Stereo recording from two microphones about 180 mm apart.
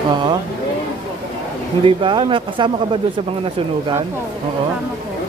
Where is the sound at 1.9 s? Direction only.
25° right (ahead or behind).